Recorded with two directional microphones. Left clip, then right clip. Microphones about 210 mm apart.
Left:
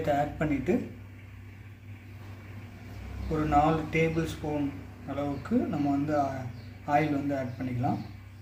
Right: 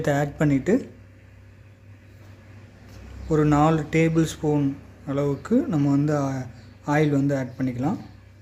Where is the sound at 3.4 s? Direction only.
55° right (ahead or behind).